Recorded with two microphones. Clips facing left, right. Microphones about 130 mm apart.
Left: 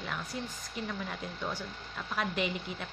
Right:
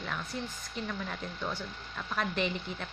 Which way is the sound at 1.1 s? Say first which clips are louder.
Even; 10° left (ahead or behind).